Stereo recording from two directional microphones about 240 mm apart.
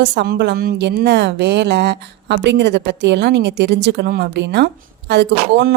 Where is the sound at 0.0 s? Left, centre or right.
Right.